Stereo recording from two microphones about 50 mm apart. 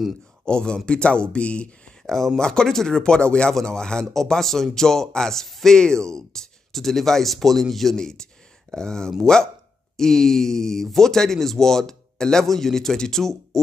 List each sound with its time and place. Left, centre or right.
0.5 s speech: centre
2.0 s speech: centre